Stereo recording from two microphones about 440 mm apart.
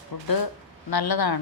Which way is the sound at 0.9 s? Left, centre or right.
Left.